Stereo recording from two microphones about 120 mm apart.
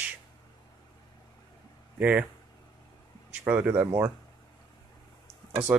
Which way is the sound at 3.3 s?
15° right (ahead or behind).